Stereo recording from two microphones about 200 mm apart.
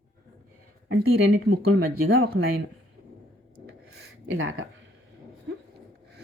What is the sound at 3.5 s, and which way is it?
Rub, 50° right (ahead or behind).